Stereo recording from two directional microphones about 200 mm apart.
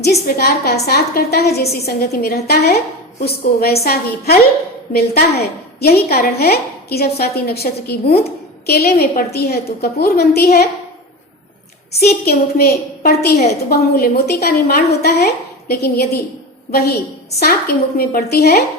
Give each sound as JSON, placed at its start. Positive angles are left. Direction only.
{"t": 0.0, "sound": "a woman's voice", "side_deg": 55}
{"t": 4.9, "sound": "a woman's voice", "side_deg": 50}
{"t": 11.9, "sound": "a woman's voice", "side_deg": 50}
{"t": 17.4, "sound": "a woman's voice", "side_deg": 50}